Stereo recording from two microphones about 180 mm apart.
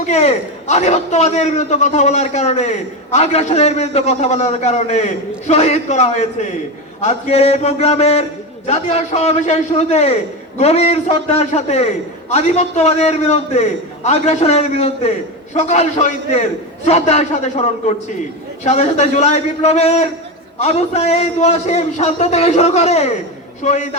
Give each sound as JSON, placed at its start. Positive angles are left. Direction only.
{"t": 0.0, "sound": "a man's voice", "side_deg": 35}